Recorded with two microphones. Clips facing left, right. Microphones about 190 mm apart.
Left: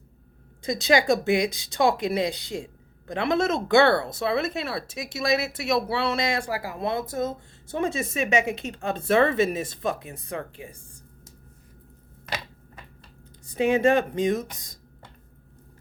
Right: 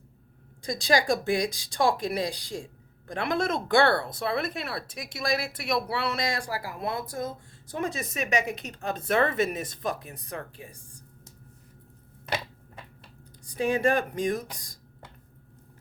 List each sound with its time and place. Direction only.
0.6 s speech: 25° left (ahead or behind)
13.4 s speech: 25° left (ahead or behind)